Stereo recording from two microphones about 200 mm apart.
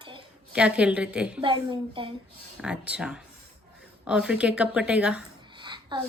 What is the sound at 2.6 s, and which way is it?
Speech, 5° right (ahead or behind).